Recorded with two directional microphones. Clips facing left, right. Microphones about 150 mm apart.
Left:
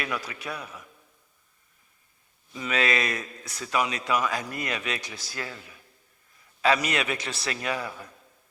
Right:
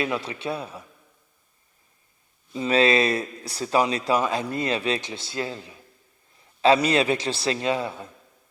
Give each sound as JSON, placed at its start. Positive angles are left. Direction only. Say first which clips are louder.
{"t": 0.0, "sound": "speech", "louder": "right 6 dB", "side_deg": -25}
{"t": 2.5, "sound": "speech", "louder": "right 7 dB", "side_deg": -30}